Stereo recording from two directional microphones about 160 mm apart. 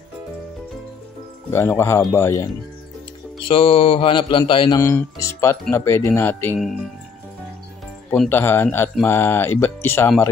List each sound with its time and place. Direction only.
1.5 s speech: 15° left (ahead or behind)
3.4 s mantra: 35° left (ahead or behind)
4.7 s speech: 20° left (ahead or behind)
8.1 s speech: 10° left (ahead or behind)